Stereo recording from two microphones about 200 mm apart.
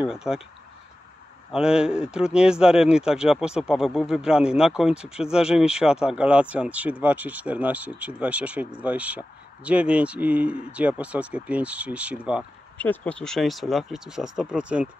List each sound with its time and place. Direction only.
0.0 s speech: 5° right (ahead or behind)
1.5 s speech: 5° right (ahead or behind)
12.7 s speech: 10° left (ahead or behind)